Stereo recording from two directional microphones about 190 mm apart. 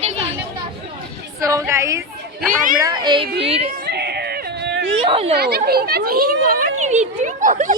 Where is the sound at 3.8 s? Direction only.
60° right (ahead or behind).